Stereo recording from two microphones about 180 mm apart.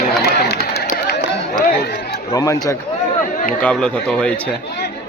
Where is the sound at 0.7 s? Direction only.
60° left (ahead or behind).